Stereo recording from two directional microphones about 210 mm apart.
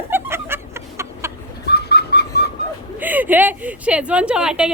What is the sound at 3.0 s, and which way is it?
A woman's voice, 10° right (ahead or behind).